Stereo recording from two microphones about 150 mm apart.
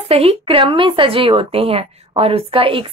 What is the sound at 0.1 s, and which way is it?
Speech, 40° right (ahead or behind).